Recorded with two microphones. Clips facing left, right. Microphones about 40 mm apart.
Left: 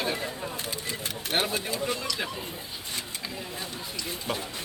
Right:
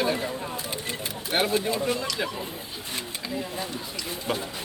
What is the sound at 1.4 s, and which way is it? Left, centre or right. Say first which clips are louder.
Speech: right 5 dB; centre.